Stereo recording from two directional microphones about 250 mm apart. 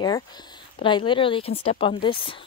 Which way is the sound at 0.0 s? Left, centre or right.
Centre.